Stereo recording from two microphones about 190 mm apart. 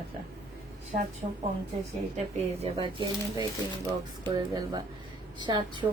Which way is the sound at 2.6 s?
25° right (ahead or behind).